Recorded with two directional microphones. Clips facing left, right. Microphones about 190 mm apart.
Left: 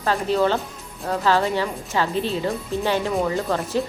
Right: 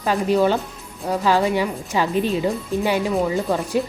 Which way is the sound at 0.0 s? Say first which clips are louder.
Right 2 dB; 15° right (ahead or behind).